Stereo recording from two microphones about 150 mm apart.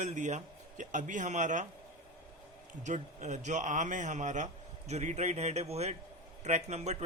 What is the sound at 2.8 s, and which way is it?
Speech, 55° right (ahead or behind).